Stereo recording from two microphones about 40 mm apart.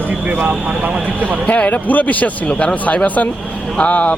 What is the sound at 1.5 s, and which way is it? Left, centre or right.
Speech, left.